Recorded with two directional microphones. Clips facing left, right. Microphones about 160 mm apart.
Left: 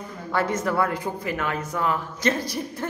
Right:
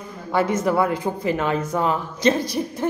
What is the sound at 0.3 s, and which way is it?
A woman's voice, 15° right (ahead or behind).